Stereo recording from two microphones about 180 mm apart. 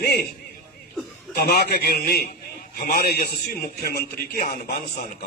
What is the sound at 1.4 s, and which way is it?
A man's voice, 60° left (ahead or behind).